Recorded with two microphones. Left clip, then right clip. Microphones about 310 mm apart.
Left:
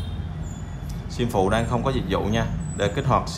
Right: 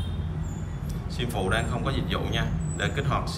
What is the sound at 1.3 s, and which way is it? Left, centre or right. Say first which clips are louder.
Speech: left 6 dB; centre.